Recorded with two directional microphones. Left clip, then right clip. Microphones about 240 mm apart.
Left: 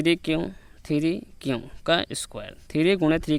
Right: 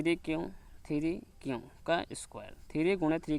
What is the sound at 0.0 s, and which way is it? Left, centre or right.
Speech, left.